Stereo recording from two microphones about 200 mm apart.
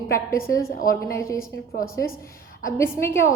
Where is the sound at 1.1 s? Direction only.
15° left (ahead or behind).